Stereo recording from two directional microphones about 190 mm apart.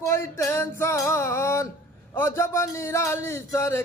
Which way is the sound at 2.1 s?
15° left (ahead or behind).